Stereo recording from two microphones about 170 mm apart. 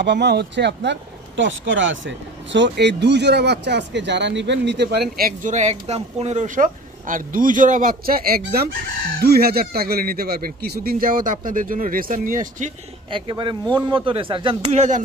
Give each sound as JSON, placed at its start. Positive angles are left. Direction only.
{"t": 0.0, "sound": "speech", "side_deg": -85}
{"t": 5.1, "sound": "speech", "side_deg": -55}
{"t": 13.1, "sound": "speech", "side_deg": -25}